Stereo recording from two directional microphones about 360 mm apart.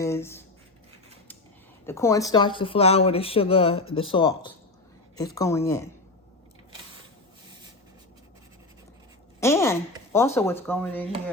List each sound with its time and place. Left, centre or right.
0.0 s a sound: centre
1.9 s speech: centre
9.4 s speech: centre